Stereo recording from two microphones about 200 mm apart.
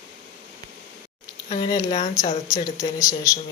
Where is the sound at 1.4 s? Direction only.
35° left (ahead or behind).